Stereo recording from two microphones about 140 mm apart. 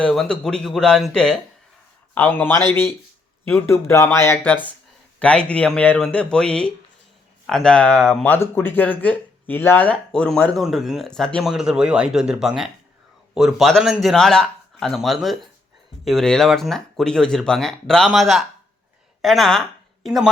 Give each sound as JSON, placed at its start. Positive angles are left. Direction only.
{"t": 0.0, "sound": "speech", "side_deg": 5}